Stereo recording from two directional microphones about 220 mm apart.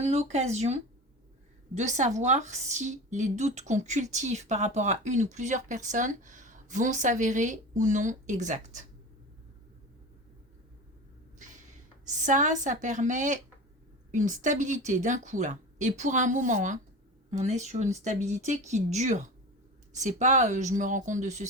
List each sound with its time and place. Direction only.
0.0 s a woman's voice: 30° right (ahead or behind)
12.0 s a woman's voice: 35° right (ahead or behind)